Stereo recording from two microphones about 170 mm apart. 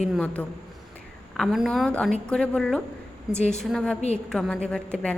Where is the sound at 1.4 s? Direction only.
Centre (ahead or behind).